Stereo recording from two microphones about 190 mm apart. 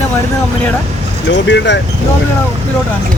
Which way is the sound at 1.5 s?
70° left (ahead or behind).